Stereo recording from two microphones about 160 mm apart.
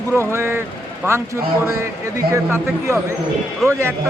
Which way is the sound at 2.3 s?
15° right (ahead or behind).